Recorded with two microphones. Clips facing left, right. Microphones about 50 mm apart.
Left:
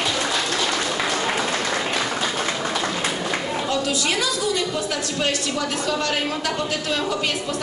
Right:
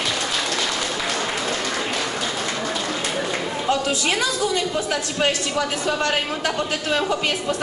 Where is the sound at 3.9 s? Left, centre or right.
Right.